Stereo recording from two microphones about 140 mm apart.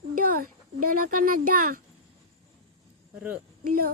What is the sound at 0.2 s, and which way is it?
A child's voice, 85° right.